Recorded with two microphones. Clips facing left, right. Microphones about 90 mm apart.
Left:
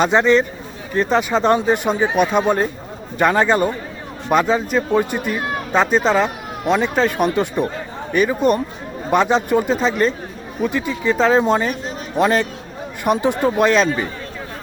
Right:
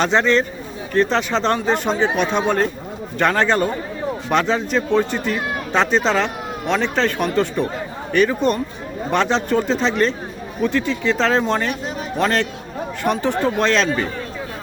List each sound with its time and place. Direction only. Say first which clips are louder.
0.0 s speech: left 2 dB; 10° left (ahead or behind)